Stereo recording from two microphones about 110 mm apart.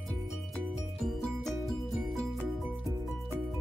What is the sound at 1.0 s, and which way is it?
Music, centre (ahead or behind).